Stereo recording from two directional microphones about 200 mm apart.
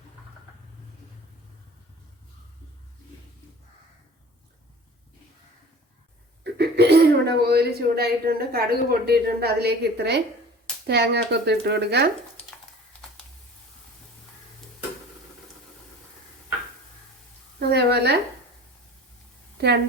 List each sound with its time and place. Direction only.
6.4 s speech: 55° right (ahead or behind)
17.6 s a woman's voice: 55° right (ahead or behind)